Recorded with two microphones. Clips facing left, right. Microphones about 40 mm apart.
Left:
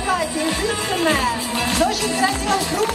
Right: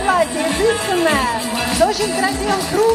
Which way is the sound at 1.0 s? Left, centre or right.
Centre.